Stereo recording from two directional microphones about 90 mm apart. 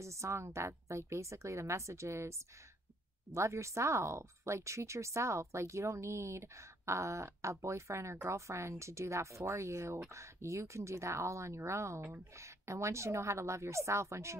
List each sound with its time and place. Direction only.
0.0 s speech: 35° right (ahead or behind)
3.3 s speech: 35° right (ahead or behind)